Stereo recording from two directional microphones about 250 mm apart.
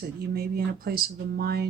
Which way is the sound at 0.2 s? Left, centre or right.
Right.